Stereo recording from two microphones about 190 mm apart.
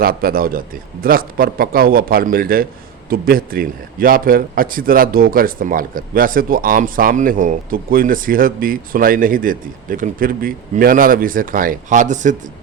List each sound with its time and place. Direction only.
0.0 s a man's voice: 50° right (ahead or behind)